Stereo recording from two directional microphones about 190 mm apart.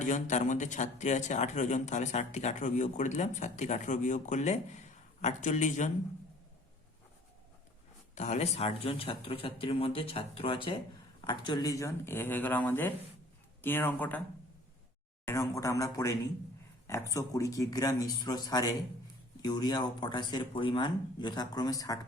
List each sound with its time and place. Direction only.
0.0 s speech: 40° left (ahead or behind)
8.1 s speech: 35° left (ahead or behind); by 14.2 s 10° left (ahead or behind)
15.2 s speech: 15° left (ahead or behind)